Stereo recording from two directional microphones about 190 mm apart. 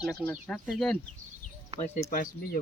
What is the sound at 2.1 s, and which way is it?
Speech, 45° left (ahead or behind).